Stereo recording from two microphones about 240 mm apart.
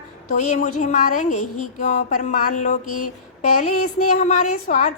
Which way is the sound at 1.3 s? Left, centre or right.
Left.